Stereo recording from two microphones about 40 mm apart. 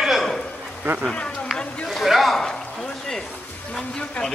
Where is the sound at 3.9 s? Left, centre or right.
Left.